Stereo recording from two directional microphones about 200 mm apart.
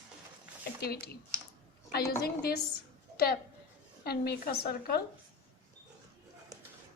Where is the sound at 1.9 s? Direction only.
50° left (ahead or behind).